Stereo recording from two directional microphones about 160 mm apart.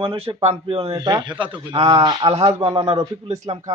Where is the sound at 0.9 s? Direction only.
25° right (ahead or behind).